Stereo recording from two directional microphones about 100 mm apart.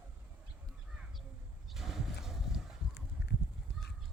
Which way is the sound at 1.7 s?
5° right (ahead or behind).